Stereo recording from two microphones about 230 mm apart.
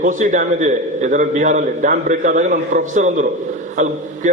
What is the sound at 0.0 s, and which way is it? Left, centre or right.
A man's voice, right.